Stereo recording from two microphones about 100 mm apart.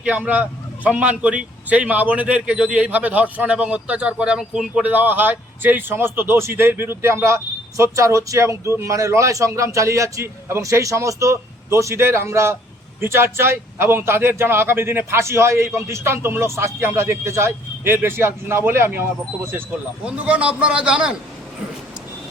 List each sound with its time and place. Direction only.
0.0 s a man's voice: 15° right (ahead or behind)
20.1 s a man's voice: 15° right (ahead or behind)